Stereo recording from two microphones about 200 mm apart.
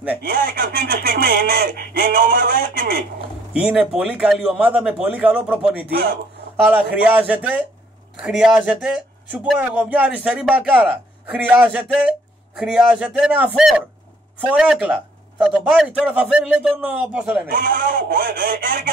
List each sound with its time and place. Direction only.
0.2 s speech: 45° right (ahead or behind)
3.5 s a man's voice: 5° right (ahead or behind)
17.5 s speech: 45° right (ahead or behind)